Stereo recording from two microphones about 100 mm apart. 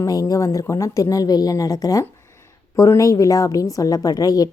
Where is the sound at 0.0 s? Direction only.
35° left (ahead or behind).